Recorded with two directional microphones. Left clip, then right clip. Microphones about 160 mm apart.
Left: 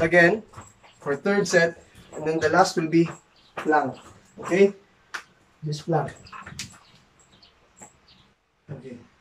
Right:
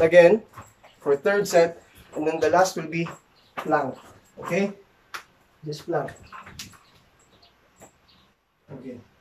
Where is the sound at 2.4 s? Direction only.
20° right (ahead or behind).